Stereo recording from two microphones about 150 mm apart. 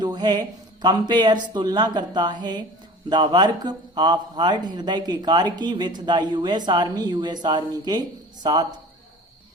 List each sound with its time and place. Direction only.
0.0 s a man's voice: 30° right (ahead or behind)